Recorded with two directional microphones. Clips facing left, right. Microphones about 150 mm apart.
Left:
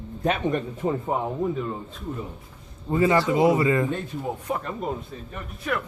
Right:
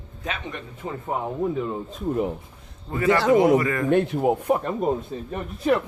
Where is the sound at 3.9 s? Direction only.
70° right (ahead or behind).